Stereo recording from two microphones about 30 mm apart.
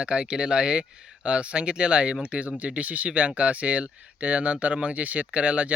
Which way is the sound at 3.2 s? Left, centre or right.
Right.